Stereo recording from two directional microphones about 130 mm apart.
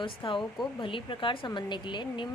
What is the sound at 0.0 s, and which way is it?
A woman's voice, 40° left (ahead or behind).